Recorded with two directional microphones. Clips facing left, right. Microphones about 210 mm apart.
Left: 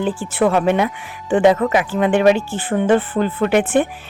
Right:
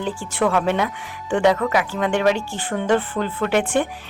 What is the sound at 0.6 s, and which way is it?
Speech, 15° left (ahead or behind).